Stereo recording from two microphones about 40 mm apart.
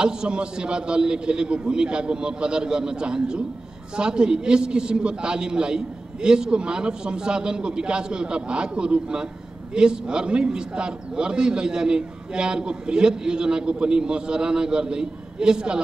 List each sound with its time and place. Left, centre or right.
0.0 s a man's voice: right